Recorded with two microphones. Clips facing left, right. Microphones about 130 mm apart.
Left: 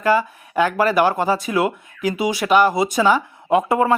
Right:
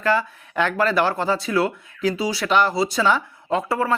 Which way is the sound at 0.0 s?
10° left (ahead or behind).